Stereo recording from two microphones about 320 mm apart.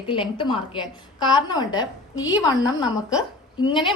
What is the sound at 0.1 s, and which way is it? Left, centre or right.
Speech, centre.